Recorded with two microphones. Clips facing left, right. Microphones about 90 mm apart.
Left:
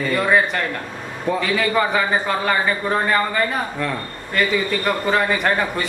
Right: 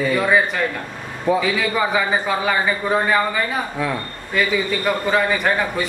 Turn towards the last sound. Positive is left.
turn(degrees=0)  # may be behind; listen again after turning